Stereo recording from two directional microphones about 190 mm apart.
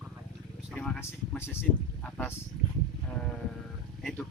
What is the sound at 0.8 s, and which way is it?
Speech, 5° left (ahead or behind).